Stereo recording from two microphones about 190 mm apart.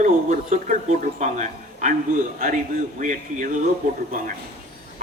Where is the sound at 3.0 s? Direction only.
40° right (ahead or behind).